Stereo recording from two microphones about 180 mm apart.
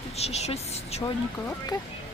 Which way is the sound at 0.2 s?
35° left (ahead or behind).